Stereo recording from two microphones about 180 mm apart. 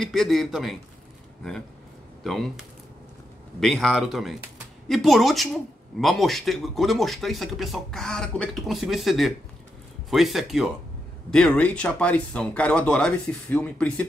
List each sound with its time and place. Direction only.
0.0 s speech: centre (ahead or behind)
2.2 s speech: centre (ahead or behind)